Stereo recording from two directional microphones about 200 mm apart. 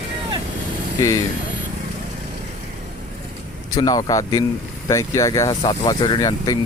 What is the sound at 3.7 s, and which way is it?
A man's voice, 20° left (ahead or behind).